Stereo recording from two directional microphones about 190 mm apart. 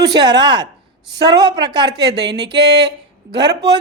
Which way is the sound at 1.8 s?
60° right (ahead or behind).